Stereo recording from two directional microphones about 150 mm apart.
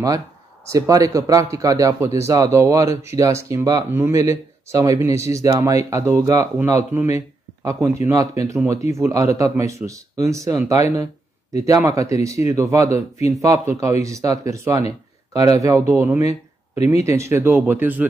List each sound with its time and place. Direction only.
0.7 s speech: 20° right (ahead or behind)